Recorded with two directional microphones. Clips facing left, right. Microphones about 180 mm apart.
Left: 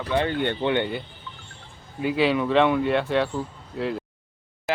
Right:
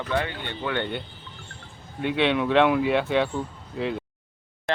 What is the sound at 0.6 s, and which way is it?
Speech, 25° left (ahead or behind).